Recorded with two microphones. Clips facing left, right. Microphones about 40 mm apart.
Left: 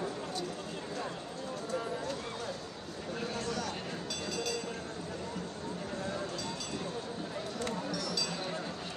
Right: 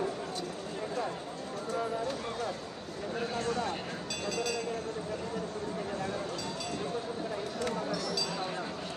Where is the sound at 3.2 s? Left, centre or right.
Right.